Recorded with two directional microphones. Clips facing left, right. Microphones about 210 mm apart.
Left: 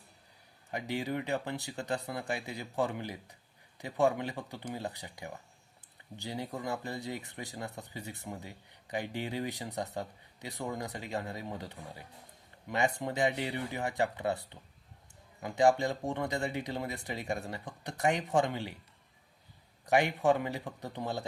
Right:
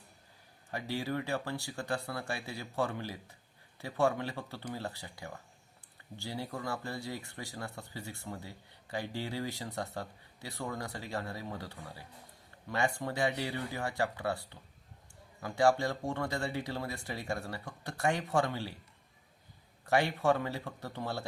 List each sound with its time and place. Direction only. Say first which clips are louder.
0.7 s speech: left 1 dB; 15° left (ahead or behind)
19.8 s speech: left 2 dB; 15° left (ahead or behind)